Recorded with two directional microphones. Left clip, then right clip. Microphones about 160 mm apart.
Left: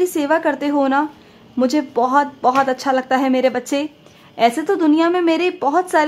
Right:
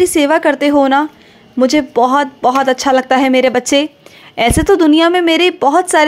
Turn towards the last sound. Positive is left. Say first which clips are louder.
# right 6 dB
turn(degrees=-25)  # may be behind; listen again after turning